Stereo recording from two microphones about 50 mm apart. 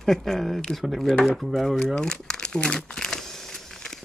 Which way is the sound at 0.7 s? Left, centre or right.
Centre.